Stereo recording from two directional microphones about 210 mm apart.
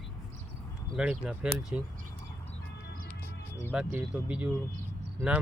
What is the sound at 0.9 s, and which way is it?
Speech, centre (ahead or behind).